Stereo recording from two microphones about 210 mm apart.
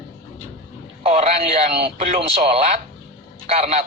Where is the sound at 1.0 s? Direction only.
30° right (ahead or behind).